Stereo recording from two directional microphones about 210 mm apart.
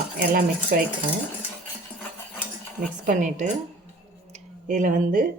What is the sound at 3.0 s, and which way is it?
Speech, 35° right (ahead or behind).